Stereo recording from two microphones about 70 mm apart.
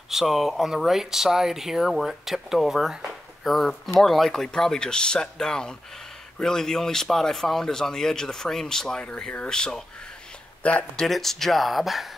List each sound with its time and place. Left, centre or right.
0.1 s speech: centre
11.1 s speech: centre